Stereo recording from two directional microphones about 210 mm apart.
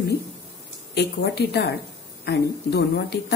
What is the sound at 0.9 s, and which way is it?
A woman's voice, 50° left (ahead or behind).